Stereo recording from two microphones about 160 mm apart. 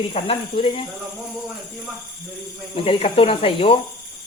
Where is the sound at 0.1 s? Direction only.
35° left (ahead or behind).